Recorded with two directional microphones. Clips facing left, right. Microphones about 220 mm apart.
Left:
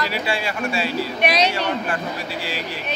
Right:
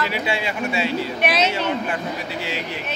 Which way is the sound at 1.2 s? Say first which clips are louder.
Left 2 dB; 5° right (ahead or behind).